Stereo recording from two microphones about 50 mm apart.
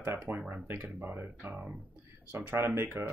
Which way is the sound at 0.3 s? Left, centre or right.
Right.